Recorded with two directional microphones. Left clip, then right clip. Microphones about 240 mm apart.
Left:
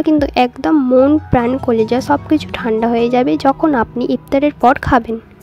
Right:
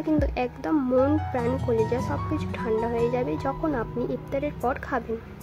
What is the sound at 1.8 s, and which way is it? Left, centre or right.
Speech, left.